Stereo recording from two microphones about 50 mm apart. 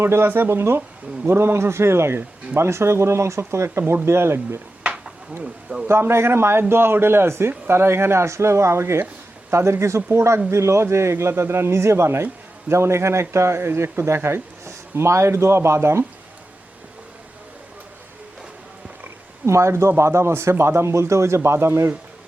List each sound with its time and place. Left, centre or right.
0.0 s a man's voice: right
5.9 s a man's voice: right
19.5 s speech: right